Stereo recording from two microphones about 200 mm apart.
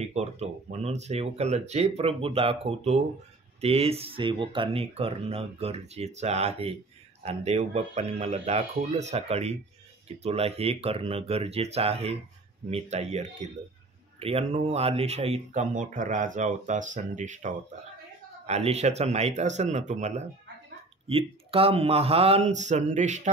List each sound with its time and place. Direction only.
0.0 s speech: 35° right (ahead or behind)